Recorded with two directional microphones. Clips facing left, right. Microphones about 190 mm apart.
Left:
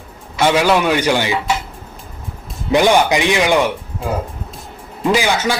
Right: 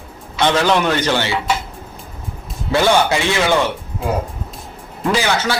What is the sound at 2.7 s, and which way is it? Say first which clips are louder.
Speech: left 2 dB; 15° left (ahead or behind).